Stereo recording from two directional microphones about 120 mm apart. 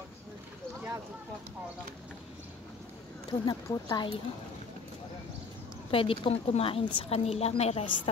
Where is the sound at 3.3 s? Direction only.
30° left (ahead or behind).